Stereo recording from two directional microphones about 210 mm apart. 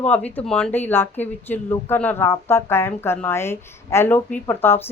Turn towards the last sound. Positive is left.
turn(degrees=10)  # may be behind; listen again after turning